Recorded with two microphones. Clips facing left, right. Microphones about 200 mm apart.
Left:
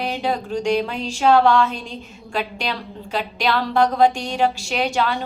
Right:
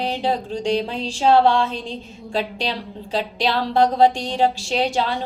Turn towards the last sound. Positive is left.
turn(degrees=-30)  # may be behind; listen again after turning